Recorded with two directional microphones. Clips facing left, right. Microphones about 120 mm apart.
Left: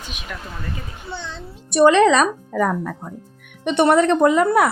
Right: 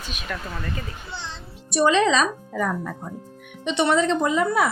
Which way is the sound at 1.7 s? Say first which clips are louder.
Left 6 dB; 60° left (ahead or behind).